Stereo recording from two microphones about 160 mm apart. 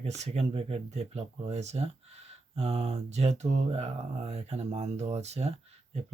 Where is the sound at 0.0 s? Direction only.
40° right (ahead or behind).